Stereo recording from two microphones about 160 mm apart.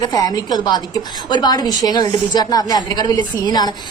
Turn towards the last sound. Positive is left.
turn(degrees=25)  # may be behind; listen again after turning